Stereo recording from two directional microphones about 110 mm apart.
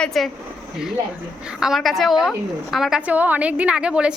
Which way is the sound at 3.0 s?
15° right (ahead or behind).